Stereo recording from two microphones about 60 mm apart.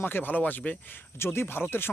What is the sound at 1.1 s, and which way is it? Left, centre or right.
Speech, left.